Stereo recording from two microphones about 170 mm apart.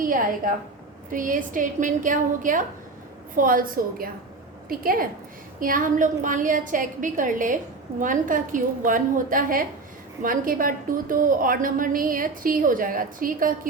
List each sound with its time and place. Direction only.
0.0 s a woman's voice: 55° right (ahead or behind)